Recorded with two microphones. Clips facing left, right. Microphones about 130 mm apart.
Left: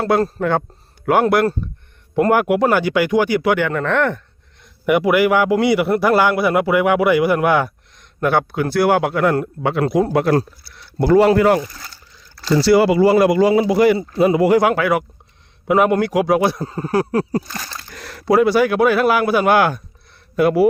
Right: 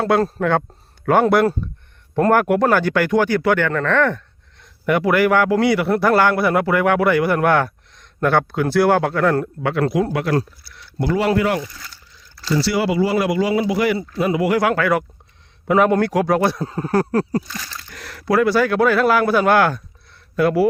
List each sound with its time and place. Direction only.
0.0 s a man's voice: centre (ahead or behind)
9.6 s speech: 20° left (ahead or behind)
14.6 s a man's voice: 15° left (ahead or behind)
17.5 s speech: 45° left (ahead or behind)
17.9 s a man's voice: 30° left (ahead or behind)